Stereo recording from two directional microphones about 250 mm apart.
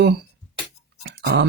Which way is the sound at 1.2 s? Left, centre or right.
Right.